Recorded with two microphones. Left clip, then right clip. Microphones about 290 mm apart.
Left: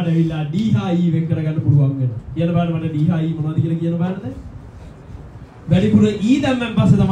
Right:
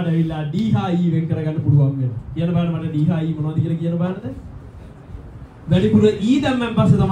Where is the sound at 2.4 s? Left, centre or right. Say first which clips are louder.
Left 4 dB; centre.